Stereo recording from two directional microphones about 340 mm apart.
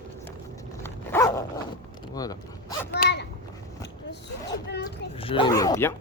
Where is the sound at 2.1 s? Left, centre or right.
Centre.